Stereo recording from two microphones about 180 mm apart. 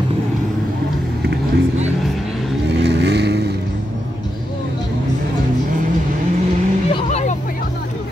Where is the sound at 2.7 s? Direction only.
70° right (ahead or behind).